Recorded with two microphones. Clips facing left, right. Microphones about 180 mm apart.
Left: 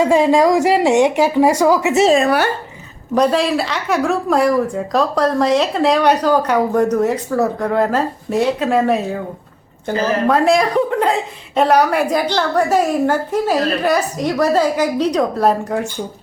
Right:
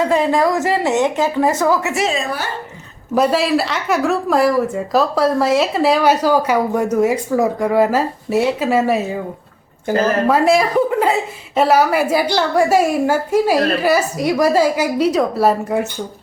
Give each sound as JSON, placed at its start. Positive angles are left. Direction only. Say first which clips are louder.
{"t": 0.0, "sound": "a woman's voice", "louder": "left 3 dB", "side_deg": 15}
{"t": 2.1, "sound": "speech", "louder": "left 8 dB", "side_deg": 65}
{"t": 3.2, "sound": "a woman's voice", "louder": "even", "side_deg": -5}
{"t": 10.2, "sound": "a woman's voice", "louder": "left 3 dB", "side_deg": -5}